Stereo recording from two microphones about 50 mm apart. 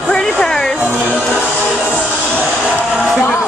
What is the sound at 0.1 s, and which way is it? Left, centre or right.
Music, centre.